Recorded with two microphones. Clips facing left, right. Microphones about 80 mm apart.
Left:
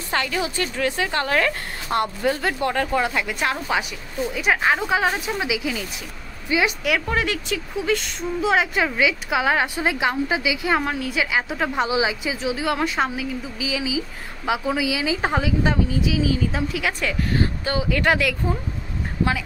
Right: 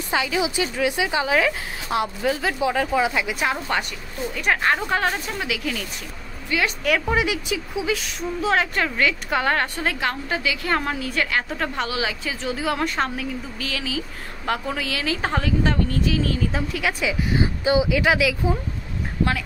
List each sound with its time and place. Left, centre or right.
0.1 s speech: centre
7.1 s speech: centre